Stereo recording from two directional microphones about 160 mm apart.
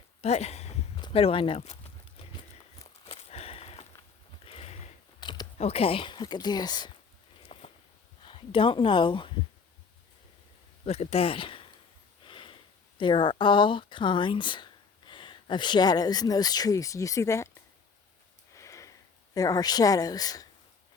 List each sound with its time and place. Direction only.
0.2 s speech: 40° left (ahead or behind)
3.1 s a sound: 40° left (ahead or behind)
5.2 s a sound: 30° left (ahead or behind)
5.5 s speech: 40° left (ahead or behind)
7.5 s a sound: 35° left (ahead or behind)
8.2 s speech: 35° left (ahead or behind)
10.8 s speech: 40° left (ahead or behind)
12.2 s sniff: 30° left (ahead or behind)
13.0 s speech: 30° left (ahead or behind)
18.5 s sniff: 20° left (ahead or behind)
19.3 s speech: 25° left (ahead or behind)